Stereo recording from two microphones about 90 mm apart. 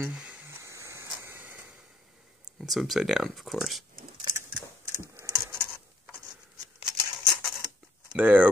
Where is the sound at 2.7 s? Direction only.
Centre (ahead or behind).